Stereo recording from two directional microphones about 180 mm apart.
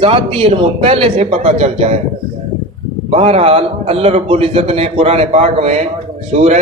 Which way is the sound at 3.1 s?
35° right (ahead or behind).